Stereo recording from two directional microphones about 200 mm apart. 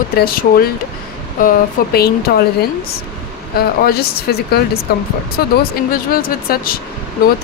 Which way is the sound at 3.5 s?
50° left (ahead or behind).